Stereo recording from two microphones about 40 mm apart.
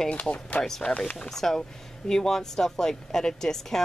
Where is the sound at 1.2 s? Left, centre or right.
Centre.